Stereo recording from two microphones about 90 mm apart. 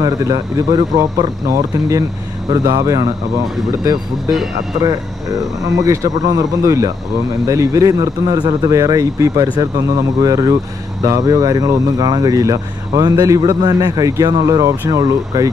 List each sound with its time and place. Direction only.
0.0 s speech: 45° right (ahead or behind)
5.9 s speech: 40° right (ahead or behind)
8.7 s speech: 35° right (ahead or behind)
13.4 s speech: 50° right (ahead or behind)